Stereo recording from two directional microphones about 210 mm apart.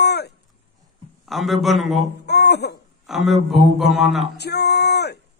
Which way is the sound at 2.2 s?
50° left (ahead or behind).